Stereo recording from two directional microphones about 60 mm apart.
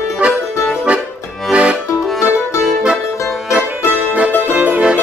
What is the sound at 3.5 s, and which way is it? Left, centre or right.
Music, right.